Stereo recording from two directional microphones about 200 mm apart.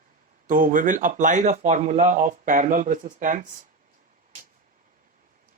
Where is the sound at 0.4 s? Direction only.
45° right (ahead or behind).